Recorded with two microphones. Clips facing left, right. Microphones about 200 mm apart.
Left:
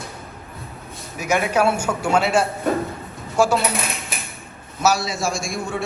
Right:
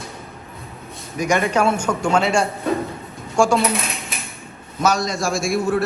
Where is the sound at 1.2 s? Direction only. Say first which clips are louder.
Right 1 dB; 5° left (ahead or behind).